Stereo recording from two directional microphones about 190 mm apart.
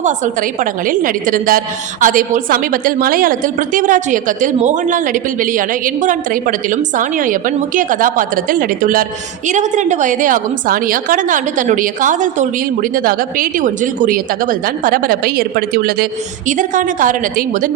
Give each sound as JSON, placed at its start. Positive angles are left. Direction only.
{"t": 0.6, "sound": "a woman's voice", "side_deg": -45}